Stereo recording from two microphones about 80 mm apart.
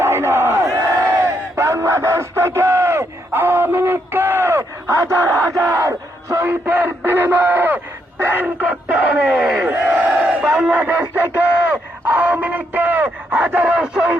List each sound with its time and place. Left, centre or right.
0.0 s crowd: right
6.5 s speech: right
8.2 s crowd: right
11.1 s a sound: right
13.7 s radio: centre